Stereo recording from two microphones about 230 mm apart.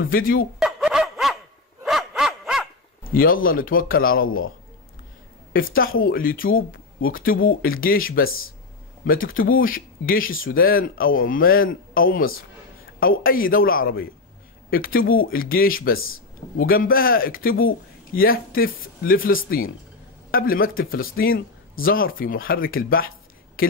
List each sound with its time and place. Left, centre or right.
0.1 s speech: left
0.6 s dog: centre
3.0 s speech: left
5.5 s speech: left